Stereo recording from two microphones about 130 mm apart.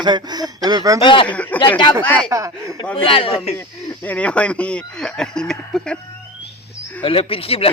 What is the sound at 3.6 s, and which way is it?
Speech, 10° left (ahead or behind).